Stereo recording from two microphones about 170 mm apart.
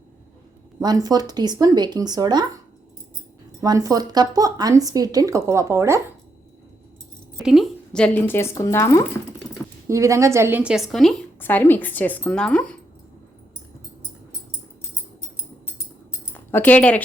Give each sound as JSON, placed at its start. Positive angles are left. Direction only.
{"t": 0.8, "sound": "a woman's voice", "side_deg": -20}
{"t": 3.6, "sound": "a woman's voice", "side_deg": -20}
{"t": 7.3, "sound": "speech", "side_deg": 0}
{"t": 9.9, "sound": "a woman's voice", "side_deg": -20}
{"t": 11.3, "sound": "speech", "side_deg": 10}
{"t": 16.3, "sound": "speech", "side_deg": 10}